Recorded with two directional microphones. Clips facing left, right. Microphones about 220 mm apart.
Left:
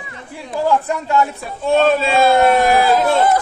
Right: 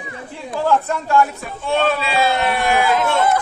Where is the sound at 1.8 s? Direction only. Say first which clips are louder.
Left 5 dB; 45° left (ahead or behind).